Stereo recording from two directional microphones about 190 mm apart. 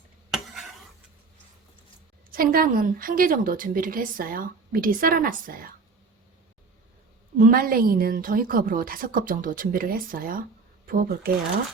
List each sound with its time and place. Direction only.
2.3 s a woman's voice: 50° right (ahead or behind)
7.3 s a woman's voice: 50° right (ahead or behind)